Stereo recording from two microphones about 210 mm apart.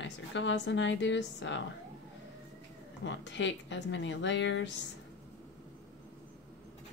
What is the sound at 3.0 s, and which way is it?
A woman's voice, 60° left (ahead or behind).